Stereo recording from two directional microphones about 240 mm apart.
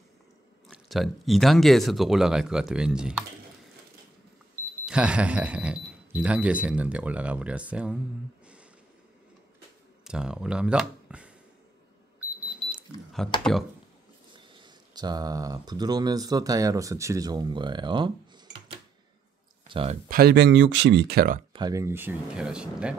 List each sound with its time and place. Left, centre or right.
0.7 s speech: centre
4.8 s speech: centre
10.0 s speech: centre
12.4 s a sound: centre
13.4 s speech: centre
14.3 s speech: centre
20.1 s speech: right
21.5 s speech: centre